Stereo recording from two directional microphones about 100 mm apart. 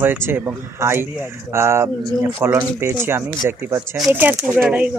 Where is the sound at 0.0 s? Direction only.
20° right (ahead or behind).